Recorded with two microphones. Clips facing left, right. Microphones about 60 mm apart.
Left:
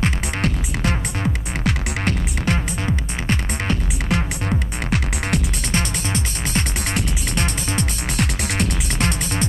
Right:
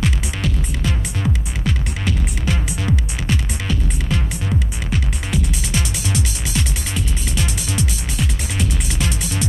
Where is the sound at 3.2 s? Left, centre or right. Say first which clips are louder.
Left 1 dB; left.